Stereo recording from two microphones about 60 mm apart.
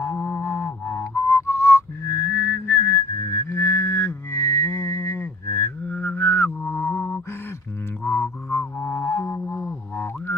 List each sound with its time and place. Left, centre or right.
0.0 s music: left
0.5 s music: left
1.1 s whistling: left
5.2 s mantra: left
6.6 s mantra: left
8.0 s music: left
8.8 s music: left
9.5 s a sound: left